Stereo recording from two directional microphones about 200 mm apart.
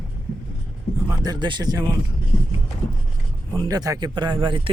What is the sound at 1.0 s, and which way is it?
Speech, 20° right (ahead or behind).